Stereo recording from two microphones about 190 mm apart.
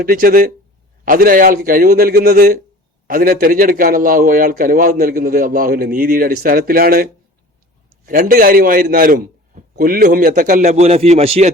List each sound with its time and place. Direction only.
0.0 s a man's voice: 50° right (ahead or behind); by 11.5 s 35° right (ahead or behind)